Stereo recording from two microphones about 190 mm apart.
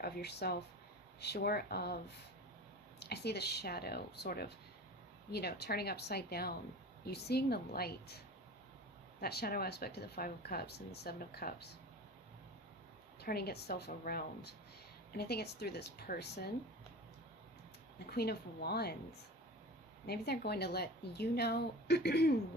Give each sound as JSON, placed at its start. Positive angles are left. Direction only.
{"t": 0.0, "sound": "speech", "side_deg": 60}
{"t": 3.0, "sound": "speech", "side_deg": 60}
{"t": 9.2, "sound": "speech", "side_deg": 55}
{"t": 13.2, "sound": "speech", "side_deg": 55}
{"t": 18.0, "sound": "speech", "side_deg": 55}
{"t": 20.1, "sound": "speech", "side_deg": 60}